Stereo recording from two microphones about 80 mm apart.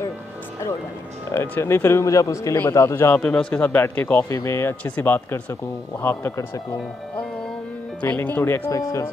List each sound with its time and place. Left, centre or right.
1.6 s speech: left
3.2 s a man's voice: centre
3.6 s speech: left
4.3 s speech: left
8.0 s speech: left
8.7 s speech: left